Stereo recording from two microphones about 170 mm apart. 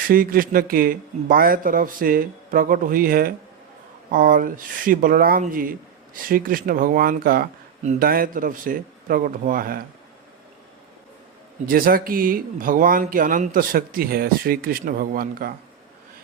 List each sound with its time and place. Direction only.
0.1 s speech: 55° right (ahead or behind)
11.6 s speech: 60° right (ahead or behind)